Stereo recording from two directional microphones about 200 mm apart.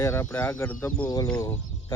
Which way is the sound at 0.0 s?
15° left (ahead or behind).